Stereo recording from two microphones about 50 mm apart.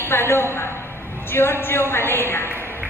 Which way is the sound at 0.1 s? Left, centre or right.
Left.